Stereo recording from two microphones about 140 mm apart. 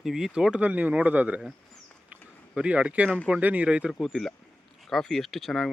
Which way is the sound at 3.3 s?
10° right (ahead or behind).